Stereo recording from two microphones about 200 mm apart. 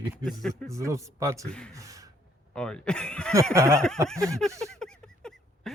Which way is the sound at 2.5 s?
5° left (ahead or behind).